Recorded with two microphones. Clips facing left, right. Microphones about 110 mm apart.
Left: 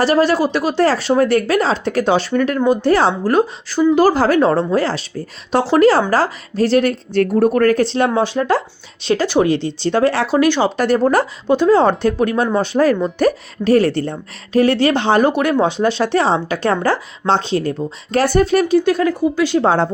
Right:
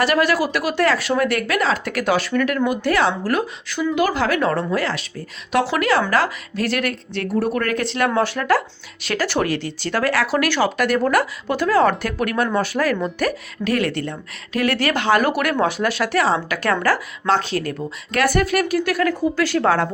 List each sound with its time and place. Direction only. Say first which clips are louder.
0.0 s speech: left 4 dB; 30° left (ahead or behind)
7.2 s speech: left 8 dB; 45° left (ahead or behind); by 19.9 s 25° left (ahead or behind)